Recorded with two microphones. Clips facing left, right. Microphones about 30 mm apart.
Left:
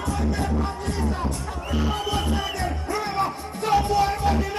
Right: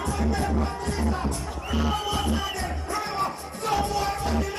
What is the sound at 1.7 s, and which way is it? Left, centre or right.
Music, centre.